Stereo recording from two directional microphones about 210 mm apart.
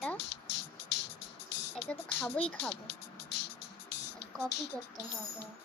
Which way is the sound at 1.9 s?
5° left (ahead or behind).